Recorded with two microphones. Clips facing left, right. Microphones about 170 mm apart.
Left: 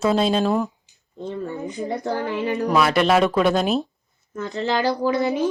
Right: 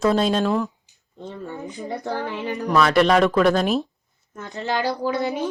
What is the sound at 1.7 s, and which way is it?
Speech, 20° left (ahead or behind).